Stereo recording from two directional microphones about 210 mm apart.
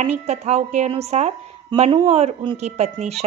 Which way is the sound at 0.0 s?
35° right (ahead or behind).